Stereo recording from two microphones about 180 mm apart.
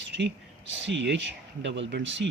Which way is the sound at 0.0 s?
75° right (ahead or behind).